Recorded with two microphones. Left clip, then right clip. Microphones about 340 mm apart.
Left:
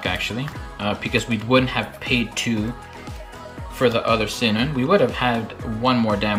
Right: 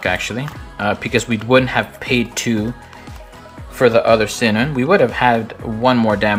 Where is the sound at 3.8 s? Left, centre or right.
Centre.